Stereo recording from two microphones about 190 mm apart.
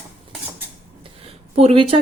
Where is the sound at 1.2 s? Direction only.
30° right (ahead or behind).